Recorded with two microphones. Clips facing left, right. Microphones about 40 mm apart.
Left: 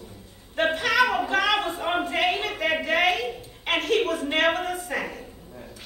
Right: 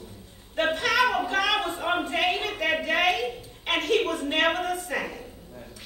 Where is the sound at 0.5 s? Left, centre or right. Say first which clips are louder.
Left 1 dB; centre.